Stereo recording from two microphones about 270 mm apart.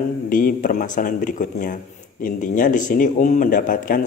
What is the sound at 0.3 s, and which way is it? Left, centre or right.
Speech, left.